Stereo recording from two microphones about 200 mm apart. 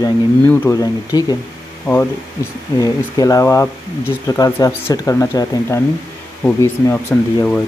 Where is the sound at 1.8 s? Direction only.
10° left (ahead or behind).